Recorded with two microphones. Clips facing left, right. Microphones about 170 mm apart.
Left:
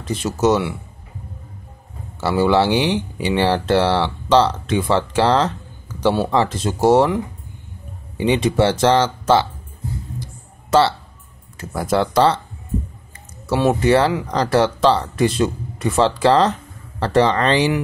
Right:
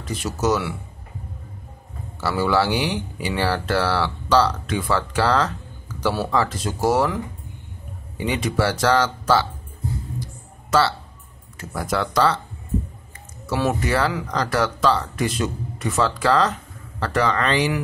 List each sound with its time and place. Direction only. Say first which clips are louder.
0.1 s speech: left 5 dB; 25° left (ahead or behind)
2.1 s speech: left 5 dB; 25° left (ahead or behind)
8.2 s speech: left 6 dB; 25° left (ahead or behind)
10.7 s speech: left 4 dB; 30° left (ahead or behind)
13.5 s speech: left 6 dB; 30° left (ahead or behind)